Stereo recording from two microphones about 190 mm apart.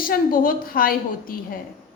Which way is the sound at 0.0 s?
50° left (ahead or behind).